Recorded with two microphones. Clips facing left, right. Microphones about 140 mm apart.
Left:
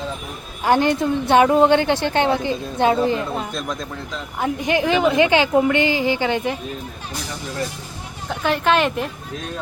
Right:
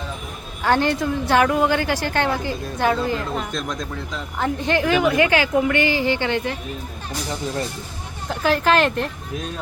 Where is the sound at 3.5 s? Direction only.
5° left (ahead or behind).